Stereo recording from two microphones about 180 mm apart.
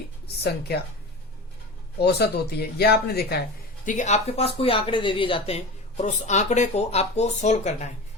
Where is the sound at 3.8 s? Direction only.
45° left (ahead or behind).